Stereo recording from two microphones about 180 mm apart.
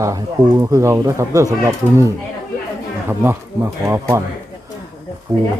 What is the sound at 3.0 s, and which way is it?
Speech, 10° right (ahead or behind).